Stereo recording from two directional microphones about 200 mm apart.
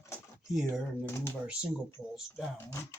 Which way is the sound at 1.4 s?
5° right (ahead or behind).